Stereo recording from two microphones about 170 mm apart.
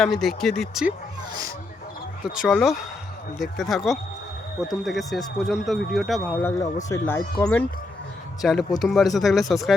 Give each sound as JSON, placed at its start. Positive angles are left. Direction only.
{"t": 0.0, "sound": "speech", "side_deg": 0}
{"t": 2.3, "sound": "speech", "side_deg": 0}
{"t": 6.3, "sound": "speech", "side_deg": 15}
{"t": 8.4, "sound": "speech", "side_deg": 0}